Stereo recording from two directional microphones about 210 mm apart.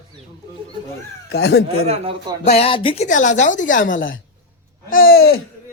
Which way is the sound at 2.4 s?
30° left (ahead or behind).